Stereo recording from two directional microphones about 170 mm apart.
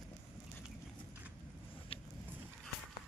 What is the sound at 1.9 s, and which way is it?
Vehicle, 30° left (ahead or behind).